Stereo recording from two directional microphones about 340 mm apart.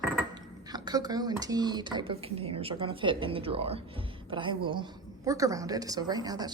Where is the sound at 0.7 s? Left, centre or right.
Centre.